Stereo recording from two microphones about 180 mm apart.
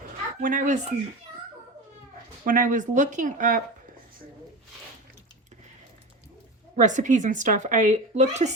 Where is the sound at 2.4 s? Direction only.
50° right (ahead or behind).